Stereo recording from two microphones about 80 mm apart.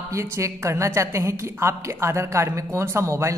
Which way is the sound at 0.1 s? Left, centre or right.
Right.